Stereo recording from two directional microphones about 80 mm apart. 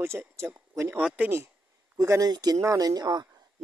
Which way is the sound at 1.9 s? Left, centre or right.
Right.